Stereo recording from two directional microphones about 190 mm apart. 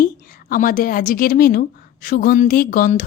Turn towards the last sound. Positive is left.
turn(degrees=45)  # may be behind; listen again after turning